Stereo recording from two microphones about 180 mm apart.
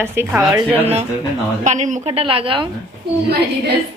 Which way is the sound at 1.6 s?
40° right (ahead or behind).